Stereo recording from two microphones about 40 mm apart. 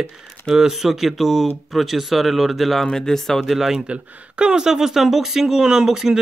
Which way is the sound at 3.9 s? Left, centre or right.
Right.